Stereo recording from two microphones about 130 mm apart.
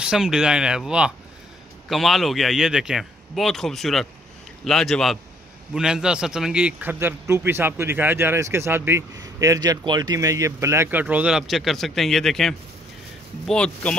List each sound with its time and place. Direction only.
0.0 s a man's voice: 5° right (ahead or behind)